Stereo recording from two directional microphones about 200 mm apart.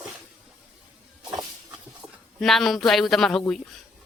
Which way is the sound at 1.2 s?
20° right (ahead or behind).